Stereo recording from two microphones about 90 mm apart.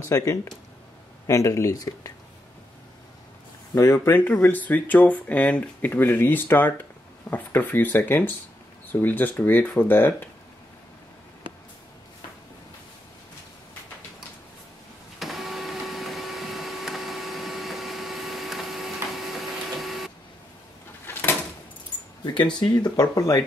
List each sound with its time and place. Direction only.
0.0 s speech: 35° left (ahead or behind)
3.7 s speech: 35° left (ahead or behind)
4.2 s speech: 20° left (ahead or behind)
15.1 s printer: centre (ahead or behind)
21.0 s a sound: 25° left (ahead or behind)
22.2 s speech: 55° left (ahead or behind)